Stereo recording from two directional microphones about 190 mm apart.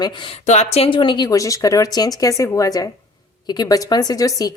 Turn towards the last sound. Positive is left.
turn(degrees=20)  # may be behind; listen again after turning